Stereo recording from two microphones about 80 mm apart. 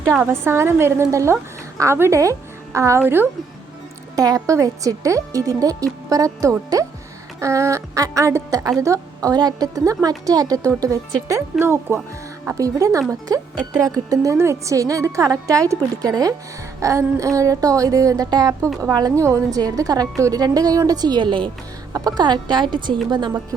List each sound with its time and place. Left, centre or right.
0.0 s a woman's voice: right
3.0 s a woman's voice: right
4.1 s a woman's voice: right
9.3 s speech: right
11.6 s a woman's voice: right
12.5 s speech: right
18.3 s a woman's voice: right
21.9 s a woman's voice: right